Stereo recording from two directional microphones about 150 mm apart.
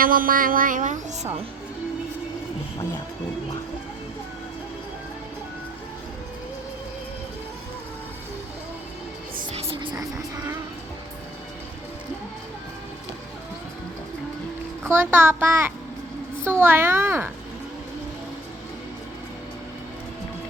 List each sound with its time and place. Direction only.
0.0 s a woman's voice: 70° right (ahead or behind); by 1.4 s 50° right (ahead or behind)
9.8 s music: 25° right (ahead or behind)
14.8 s a child's voice: 15° right (ahead or behind)